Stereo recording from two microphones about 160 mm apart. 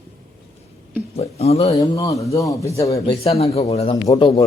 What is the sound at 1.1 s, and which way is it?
Speech, 40° left (ahead or behind).